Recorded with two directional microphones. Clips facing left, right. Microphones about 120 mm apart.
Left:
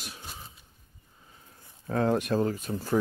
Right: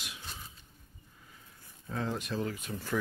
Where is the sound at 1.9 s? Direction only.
55° left (ahead or behind).